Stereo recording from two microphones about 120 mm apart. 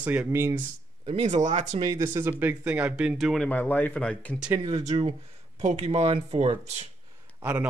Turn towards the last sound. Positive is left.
turn(degrees=-15)  # may be behind; listen again after turning